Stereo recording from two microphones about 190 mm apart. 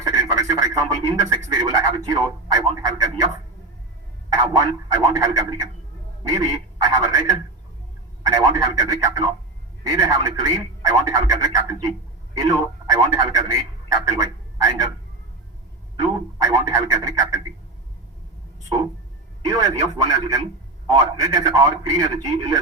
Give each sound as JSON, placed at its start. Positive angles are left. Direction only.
{"t": 0.0, "sound": "radio", "side_deg": -20}
{"t": 1.5, "sound": "speech", "side_deg": -20}
{"t": 4.3, "sound": "speech", "side_deg": -20}
{"t": 16.0, "sound": "speech", "side_deg": -20}
{"t": 19.4, "sound": "speech", "side_deg": -20}